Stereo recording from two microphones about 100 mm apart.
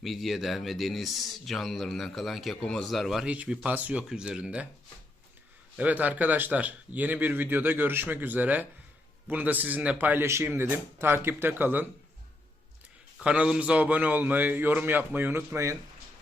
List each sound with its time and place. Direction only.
0.0 s speech: centre (ahead or behind)
3.2 s a man's voice: 15° right (ahead or behind)
5.7 s a man's voice: 15° right (ahead or behind)
13.1 s a man's voice: 10° right (ahead or behind); by 15.8 s 30° right (ahead or behind)